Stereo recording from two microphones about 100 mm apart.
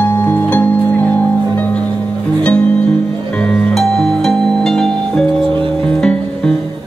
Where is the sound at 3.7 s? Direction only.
Centre (ahead or behind).